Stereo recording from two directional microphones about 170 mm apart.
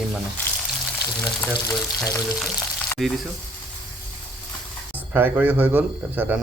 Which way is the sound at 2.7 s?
5° left (ahead or behind).